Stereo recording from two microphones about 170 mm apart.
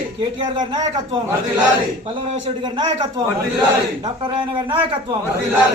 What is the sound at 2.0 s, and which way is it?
A man's voice, 30° right (ahead or behind).